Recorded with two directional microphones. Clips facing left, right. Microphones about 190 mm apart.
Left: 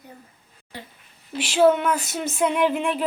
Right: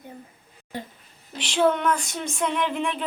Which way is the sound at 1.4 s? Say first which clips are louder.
Left 4 dB; 5° left (ahead or behind).